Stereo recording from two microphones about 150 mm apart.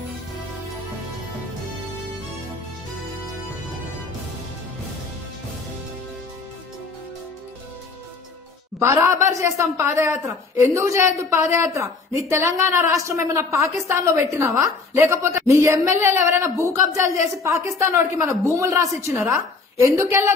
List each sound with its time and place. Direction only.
8.7 s a woman's voice: 20° right (ahead or behind)